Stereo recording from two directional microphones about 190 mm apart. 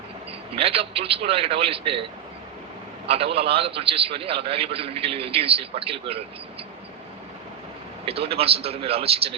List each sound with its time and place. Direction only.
0.3 s a man's voice: 30° right (ahead or behind)
3.3 s a man's voice: 30° right (ahead or behind)
8.0 s a man's voice: 30° right (ahead or behind)